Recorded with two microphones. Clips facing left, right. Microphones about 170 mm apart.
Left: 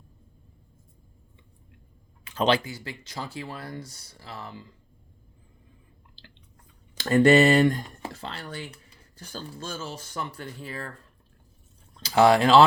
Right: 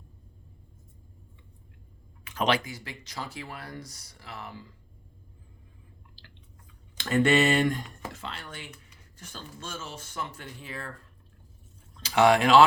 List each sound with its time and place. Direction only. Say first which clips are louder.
2.2 s speech: left 3 dB; 30° left (ahead or behind)
6.9 s speech: left 5 dB; 35° left (ahead or behind)
12.0 s speech: left 2 dB; 35° left (ahead or behind)